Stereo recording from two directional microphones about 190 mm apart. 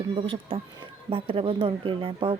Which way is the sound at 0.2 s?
30° right (ahead or behind).